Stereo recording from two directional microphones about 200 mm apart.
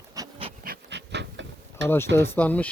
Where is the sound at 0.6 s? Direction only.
55° right (ahead or behind).